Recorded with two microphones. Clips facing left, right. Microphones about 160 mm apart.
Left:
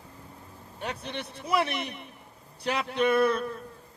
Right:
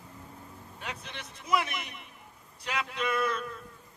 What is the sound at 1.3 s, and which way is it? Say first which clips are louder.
A man's voice: left 2 dB; 35° left (ahead or behind).